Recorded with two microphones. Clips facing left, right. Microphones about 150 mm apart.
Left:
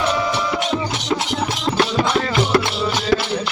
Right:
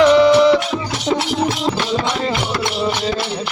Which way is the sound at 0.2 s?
70° right (ahead or behind).